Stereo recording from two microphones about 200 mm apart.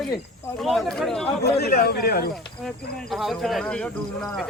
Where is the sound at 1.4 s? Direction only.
55° left (ahead or behind).